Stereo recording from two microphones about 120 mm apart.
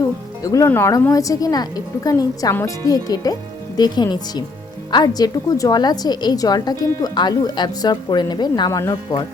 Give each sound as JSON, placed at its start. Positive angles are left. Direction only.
{"t": 0.4, "sound": "a woman's voice", "side_deg": 25}